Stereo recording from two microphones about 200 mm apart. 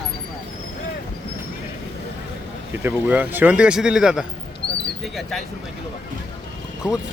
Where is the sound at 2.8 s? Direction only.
10° right (ahead or behind).